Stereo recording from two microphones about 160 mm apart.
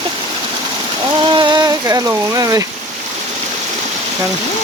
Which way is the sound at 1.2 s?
30° right (ahead or behind).